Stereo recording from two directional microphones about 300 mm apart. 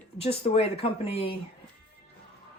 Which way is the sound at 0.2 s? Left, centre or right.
Centre.